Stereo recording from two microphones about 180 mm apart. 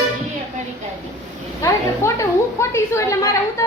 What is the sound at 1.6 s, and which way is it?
A woman's voice, 15° left (ahead or behind).